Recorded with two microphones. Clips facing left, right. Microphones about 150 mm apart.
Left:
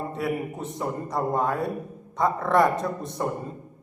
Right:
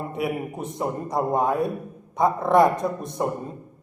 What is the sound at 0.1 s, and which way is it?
A man's voice, 15° right (ahead or behind).